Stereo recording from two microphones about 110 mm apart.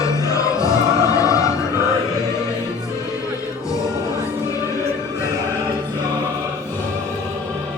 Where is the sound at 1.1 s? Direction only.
30° left (ahead or behind).